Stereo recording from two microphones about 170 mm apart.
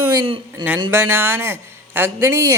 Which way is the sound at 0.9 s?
15° right (ahead or behind).